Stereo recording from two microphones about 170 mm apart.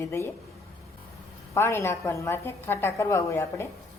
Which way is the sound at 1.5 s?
15° left (ahead or behind).